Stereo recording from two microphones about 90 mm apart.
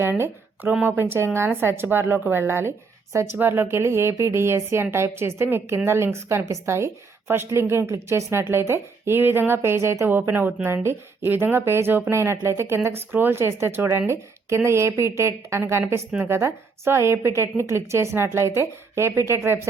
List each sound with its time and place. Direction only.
0.0 s a woman's voice: 25° right (ahead or behind)